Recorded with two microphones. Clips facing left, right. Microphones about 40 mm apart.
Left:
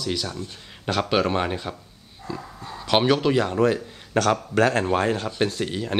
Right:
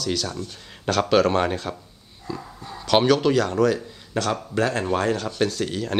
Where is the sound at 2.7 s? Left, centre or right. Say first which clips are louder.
Right 2 dB; centre.